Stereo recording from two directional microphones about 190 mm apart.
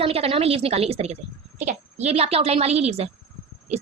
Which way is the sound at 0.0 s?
30° right (ahead or behind).